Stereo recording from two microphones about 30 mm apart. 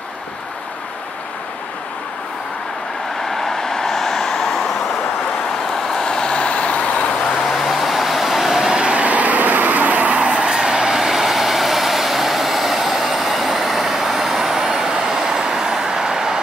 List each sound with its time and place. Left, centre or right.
3.3 s vehicle: centre
5.9 s vehicle: centre; by 6.9 s left
7.5 s vehicle: centre
8.9 s vehicle: right; by 16.3 s centre